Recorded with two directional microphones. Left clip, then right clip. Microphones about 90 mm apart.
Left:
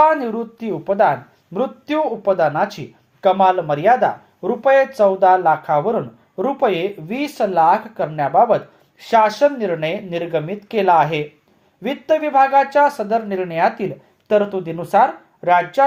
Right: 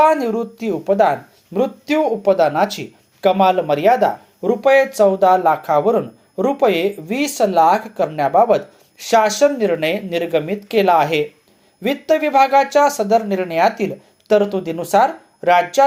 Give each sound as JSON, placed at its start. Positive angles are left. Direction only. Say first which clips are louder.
{"t": 0.0, "sound": "speech", "louder": "right 1 dB", "side_deg": -20}